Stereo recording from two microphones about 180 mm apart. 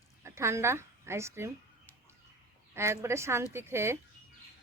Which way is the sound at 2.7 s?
15° right (ahead or behind).